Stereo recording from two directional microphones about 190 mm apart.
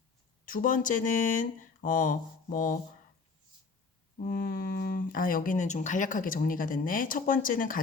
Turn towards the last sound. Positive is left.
turn(degrees=45)  # may be behind; listen again after turning